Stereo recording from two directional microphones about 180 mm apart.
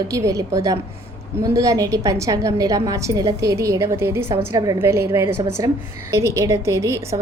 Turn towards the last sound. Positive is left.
turn(degrees=-15)  # may be behind; listen again after turning